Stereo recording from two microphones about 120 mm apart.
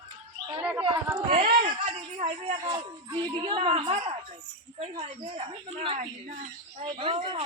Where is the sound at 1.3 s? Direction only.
60° right (ahead or behind).